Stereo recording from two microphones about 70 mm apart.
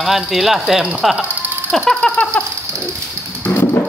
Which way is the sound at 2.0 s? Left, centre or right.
Centre.